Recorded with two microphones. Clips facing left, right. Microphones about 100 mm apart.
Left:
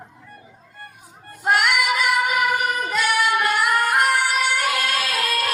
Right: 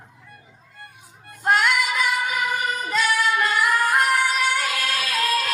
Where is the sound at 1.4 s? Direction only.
5° left (ahead or behind).